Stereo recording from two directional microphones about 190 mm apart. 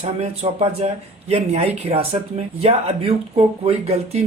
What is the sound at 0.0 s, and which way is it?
Speech, 35° right (ahead or behind).